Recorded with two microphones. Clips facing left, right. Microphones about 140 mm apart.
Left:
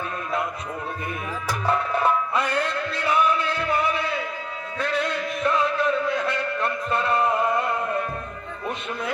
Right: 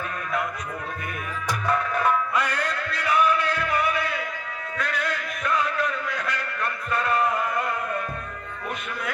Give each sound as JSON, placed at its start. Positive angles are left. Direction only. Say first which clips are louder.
{"t": 1.6, "sound": "music", "louder": "left 2 dB", "side_deg": 30}